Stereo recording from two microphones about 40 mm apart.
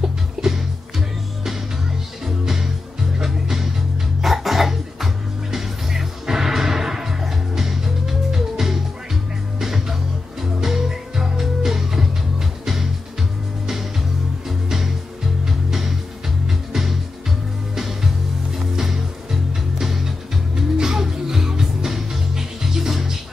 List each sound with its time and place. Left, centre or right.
0.0 s music: centre
2.2 s music: centre
4.2 s music: centre
15.4 s music: centre
17.7 s music: centre
19.8 s music: centre